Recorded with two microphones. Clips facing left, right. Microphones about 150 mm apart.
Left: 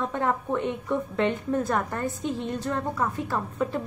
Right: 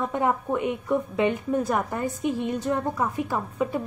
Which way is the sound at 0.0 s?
10° right (ahead or behind).